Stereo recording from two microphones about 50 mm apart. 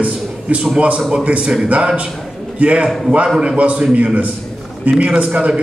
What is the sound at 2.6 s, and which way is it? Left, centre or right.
A man's voice, right.